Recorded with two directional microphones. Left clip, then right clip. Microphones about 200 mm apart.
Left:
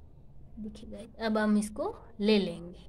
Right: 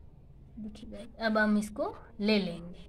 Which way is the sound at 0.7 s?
15° left (ahead or behind).